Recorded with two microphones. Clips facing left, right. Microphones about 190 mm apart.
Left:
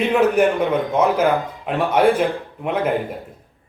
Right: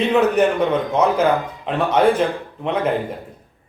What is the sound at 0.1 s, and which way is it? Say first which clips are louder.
Speech: left 1 dB; 10° left (ahead or behind).